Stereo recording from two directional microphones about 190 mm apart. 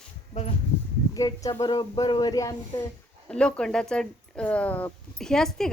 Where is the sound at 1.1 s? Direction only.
20° left (ahead or behind).